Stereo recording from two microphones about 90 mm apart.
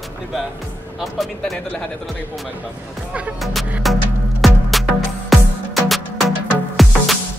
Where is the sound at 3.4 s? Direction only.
Centre (ahead or behind).